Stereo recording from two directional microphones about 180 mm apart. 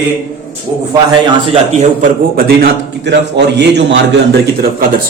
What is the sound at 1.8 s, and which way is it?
A man's voice, 50° right (ahead or behind).